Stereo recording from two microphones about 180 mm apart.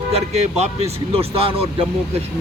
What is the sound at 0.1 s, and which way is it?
Speech, 40° right (ahead or behind).